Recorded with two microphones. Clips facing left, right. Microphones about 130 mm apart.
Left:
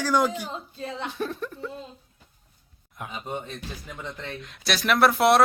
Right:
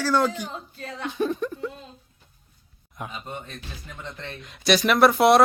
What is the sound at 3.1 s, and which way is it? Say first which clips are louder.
A man's voice: left 3 dB; 15° left (ahead or behind).